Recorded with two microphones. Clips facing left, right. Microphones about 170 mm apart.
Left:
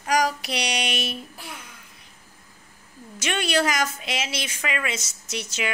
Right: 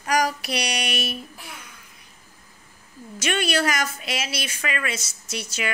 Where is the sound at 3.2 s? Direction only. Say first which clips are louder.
Even; 20° left (ahead or behind).